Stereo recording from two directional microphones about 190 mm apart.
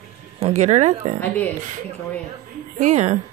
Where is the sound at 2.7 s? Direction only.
40° right (ahead or behind).